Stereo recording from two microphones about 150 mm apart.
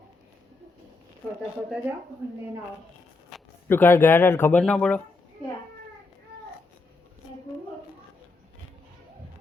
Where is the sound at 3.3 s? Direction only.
Centre (ahead or behind).